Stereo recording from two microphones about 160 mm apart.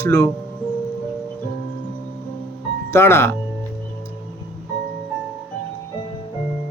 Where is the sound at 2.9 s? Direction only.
15° left (ahead or behind).